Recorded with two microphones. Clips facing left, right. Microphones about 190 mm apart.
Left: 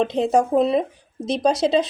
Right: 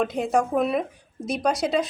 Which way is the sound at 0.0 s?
30° left (ahead or behind).